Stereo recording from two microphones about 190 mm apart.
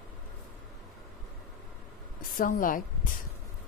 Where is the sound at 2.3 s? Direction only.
45° left (ahead or behind).